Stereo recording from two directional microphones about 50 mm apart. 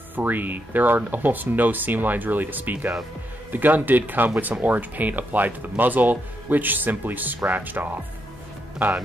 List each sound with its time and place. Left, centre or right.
0.1 s speech: right